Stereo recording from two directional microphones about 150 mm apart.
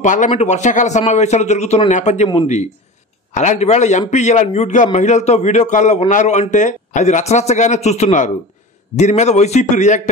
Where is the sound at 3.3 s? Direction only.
55° left (ahead or behind).